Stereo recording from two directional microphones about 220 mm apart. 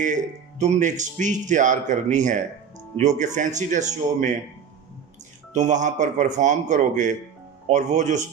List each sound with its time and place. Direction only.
0.6 s speech: 35° right (ahead or behind)
5.5 s speech: 35° right (ahead or behind)